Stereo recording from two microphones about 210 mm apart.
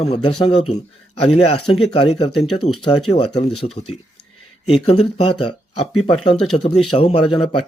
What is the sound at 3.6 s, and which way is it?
A man's voice, 35° left (ahead or behind).